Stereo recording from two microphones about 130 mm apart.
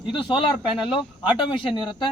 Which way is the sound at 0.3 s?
40° left (ahead or behind).